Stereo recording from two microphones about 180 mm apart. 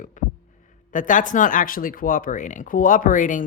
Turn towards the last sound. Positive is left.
turn(degrees=45)  # may be behind; listen again after turning